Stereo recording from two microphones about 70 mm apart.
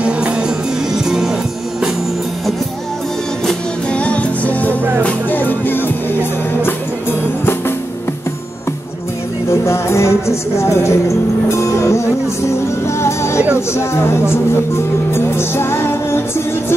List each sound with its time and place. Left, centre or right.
0.0 s music: centre
3.9 s music: centre
9.5 s music: left